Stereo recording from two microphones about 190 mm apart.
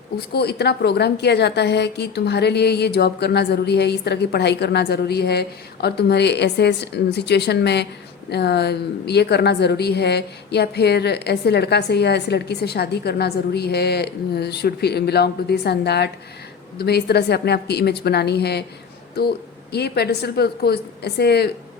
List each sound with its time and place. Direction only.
0.3 s a woman's voice: 60° left (ahead or behind)
19.7 s a woman's voice: 60° left (ahead or behind)